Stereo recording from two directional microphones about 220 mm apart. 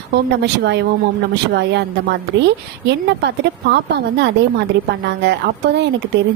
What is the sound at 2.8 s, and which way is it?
A woman's voice, 50° right (ahead or behind).